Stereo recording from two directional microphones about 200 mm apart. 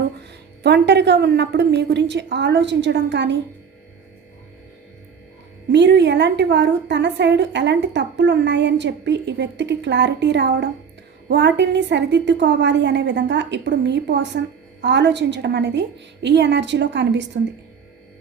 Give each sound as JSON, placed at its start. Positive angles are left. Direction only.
{"t": 0.2, "sound": "a woman's voice", "side_deg": -55}
{"t": 5.7, "sound": "a woman's voice", "side_deg": -60}